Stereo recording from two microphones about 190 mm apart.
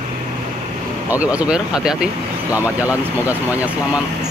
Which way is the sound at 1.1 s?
5° right (ahead or behind).